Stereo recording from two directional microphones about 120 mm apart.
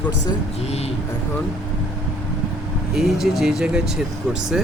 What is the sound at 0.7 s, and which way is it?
Speech, 60° left (ahead or behind).